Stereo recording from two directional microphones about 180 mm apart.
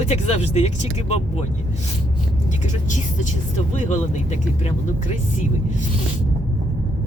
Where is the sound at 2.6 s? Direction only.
40° left (ahead or behind).